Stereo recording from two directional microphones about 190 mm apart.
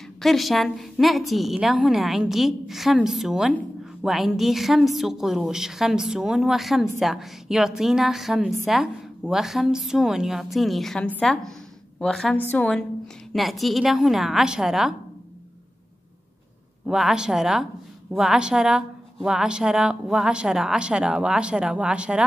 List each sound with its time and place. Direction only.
0.2 s a woman's voice: centre (ahead or behind)
16.8 s a woman's voice: 5° right (ahead or behind)